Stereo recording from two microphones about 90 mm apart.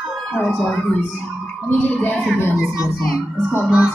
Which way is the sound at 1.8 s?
20° left (ahead or behind).